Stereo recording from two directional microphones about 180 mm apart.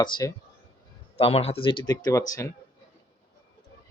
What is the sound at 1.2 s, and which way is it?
Speech, 35° left (ahead or behind).